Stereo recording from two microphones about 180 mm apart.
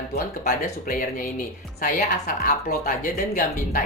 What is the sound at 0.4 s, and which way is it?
A woman's voice, 50° left (ahead or behind).